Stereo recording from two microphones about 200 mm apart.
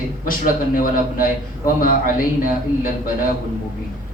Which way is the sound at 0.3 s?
45° left (ahead or behind).